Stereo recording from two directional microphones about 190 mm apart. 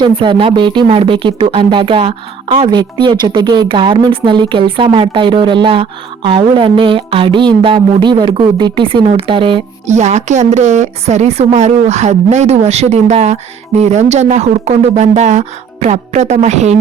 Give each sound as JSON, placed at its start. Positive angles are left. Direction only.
{"t": 0.0, "sound": "speech", "side_deg": -25}